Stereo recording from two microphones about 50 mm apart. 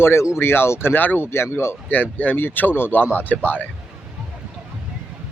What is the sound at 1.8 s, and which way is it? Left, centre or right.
Speech, left.